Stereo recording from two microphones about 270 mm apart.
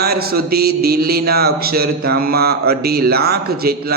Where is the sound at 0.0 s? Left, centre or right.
Right.